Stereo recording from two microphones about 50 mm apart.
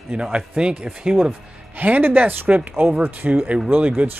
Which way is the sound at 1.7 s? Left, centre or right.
Right.